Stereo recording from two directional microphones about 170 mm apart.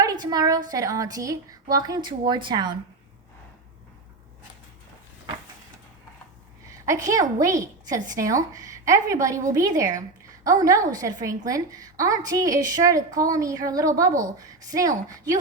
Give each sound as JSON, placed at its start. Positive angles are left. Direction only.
{"t": 0.0, "sound": "a woman's voice", "side_deg": -20}
{"t": 6.7, "sound": "a woman's voice", "side_deg": -20}